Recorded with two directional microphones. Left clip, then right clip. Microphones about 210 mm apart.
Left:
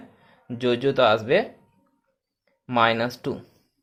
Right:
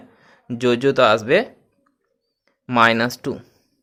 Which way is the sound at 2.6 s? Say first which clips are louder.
Right 5 dB; 20° right (ahead or behind).